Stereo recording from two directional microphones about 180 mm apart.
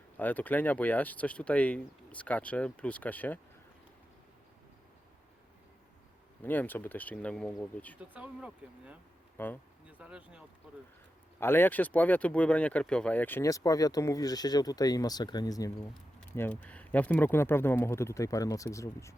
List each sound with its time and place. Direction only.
0.2 s speech: 10° left (ahead or behind)
6.4 s speech: 10° left (ahead or behind)
8.1 s speech: 5° right (ahead or behind)
9.4 s speech: 10° left (ahead or behind)
10.0 s speech: 5° right (ahead or behind)
11.3 s speech: 10° left (ahead or behind)